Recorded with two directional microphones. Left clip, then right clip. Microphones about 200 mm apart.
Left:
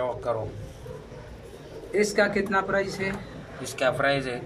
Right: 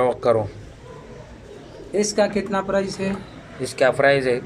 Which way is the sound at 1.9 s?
15° right (ahead or behind).